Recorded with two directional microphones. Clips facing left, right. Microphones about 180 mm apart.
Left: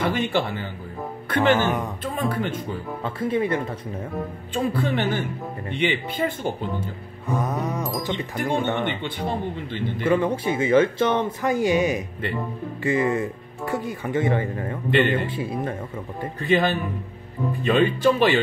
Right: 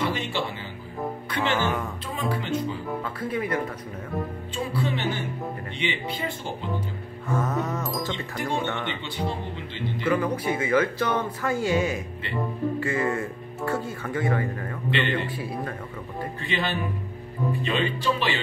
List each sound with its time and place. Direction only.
0.0 s speech: 55° left (ahead or behind)
1.5 s speech: 20° left (ahead or behind)
2.1 s speech: 50° left (ahead or behind)
3.0 s speech: 25° left (ahead or behind)
4.7 s speech: 50° left (ahead or behind)
7.2 s music: 15° left (ahead or behind)
8.7 s speech: 50° left (ahead or behind)
10.0 s speech: 25° left (ahead or behind)
14.9 s speech: 50° left (ahead or behind)
15.3 s speech: 25° left (ahead or behind)
16.4 s speech: 45° left (ahead or behind)